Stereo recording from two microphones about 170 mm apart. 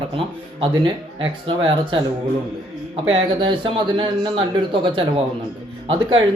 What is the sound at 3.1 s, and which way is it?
Speech, 30° right (ahead or behind).